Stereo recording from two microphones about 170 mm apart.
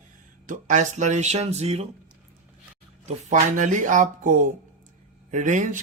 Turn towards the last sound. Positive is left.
turn(degrees=-45)  # may be behind; listen again after turning